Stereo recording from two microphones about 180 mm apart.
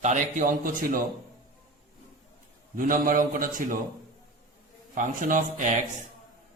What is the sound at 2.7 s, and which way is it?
Speech, 50° right (ahead or behind).